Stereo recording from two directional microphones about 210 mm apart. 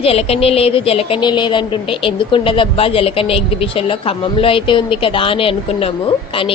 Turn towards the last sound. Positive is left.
turn(degrees=25)  # may be behind; listen again after turning